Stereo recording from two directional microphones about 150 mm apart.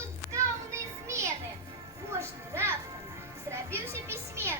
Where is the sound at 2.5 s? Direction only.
15° right (ahead or behind).